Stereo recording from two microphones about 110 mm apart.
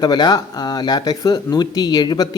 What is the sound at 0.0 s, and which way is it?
A man's voice, 40° left (ahead or behind).